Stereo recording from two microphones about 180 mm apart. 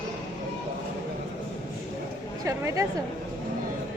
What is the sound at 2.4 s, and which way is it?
Speech, 20° right (ahead or behind).